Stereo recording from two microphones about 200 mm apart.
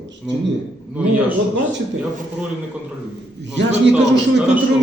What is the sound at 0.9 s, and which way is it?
Speech, 5° right (ahead or behind).